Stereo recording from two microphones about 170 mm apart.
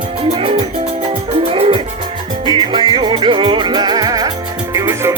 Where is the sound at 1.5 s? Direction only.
35° right (ahead or behind).